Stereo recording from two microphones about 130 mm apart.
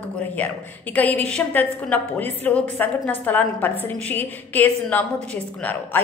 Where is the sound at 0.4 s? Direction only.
10° left (ahead or behind).